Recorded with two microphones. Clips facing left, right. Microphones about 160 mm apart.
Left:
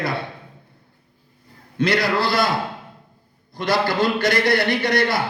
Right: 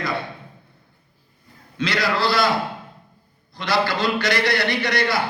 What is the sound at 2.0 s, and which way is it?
Speech, 55° left (ahead or behind).